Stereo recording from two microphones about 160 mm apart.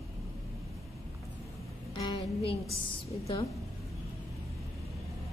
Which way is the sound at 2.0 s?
30° left (ahead or behind).